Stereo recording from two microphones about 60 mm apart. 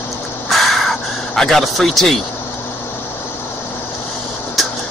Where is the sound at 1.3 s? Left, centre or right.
Centre.